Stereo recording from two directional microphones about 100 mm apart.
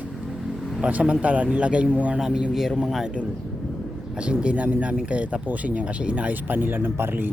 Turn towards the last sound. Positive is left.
turn(degrees=-20)  # may be behind; listen again after turning